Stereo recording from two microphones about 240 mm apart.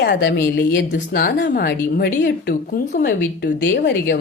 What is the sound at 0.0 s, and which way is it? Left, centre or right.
Speech, left.